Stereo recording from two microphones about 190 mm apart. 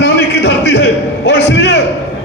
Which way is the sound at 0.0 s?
65° left (ahead or behind).